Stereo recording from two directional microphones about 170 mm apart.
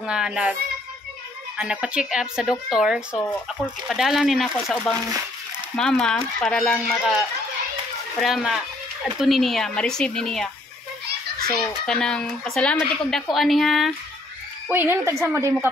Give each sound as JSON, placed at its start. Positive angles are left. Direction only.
{"t": 0.0, "sound": "speech", "side_deg": -5}
{"t": 1.6, "sound": "speech", "side_deg": -5}
{"t": 11.4, "sound": "speech", "side_deg": 20}
{"t": 11.8, "sound": "speech", "side_deg": 5}
{"t": 14.7, "sound": "speech", "side_deg": -15}